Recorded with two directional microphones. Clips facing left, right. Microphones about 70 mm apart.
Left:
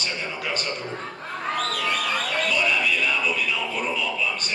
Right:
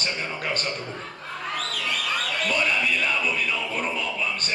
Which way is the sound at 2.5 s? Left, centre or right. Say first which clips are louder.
Even; right.